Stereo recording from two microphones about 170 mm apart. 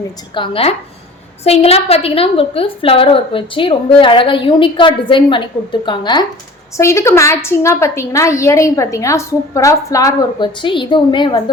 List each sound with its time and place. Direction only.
0.3 s a woman's voice: 35° left (ahead or behind)